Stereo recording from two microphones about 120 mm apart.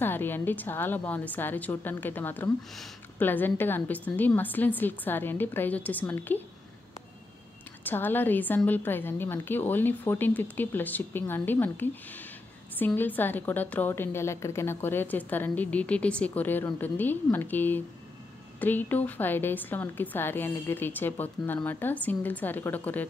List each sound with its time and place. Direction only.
0.0 s a woman's voice: 15° left (ahead or behind)
7.8 s a woman's voice: 15° left (ahead or behind)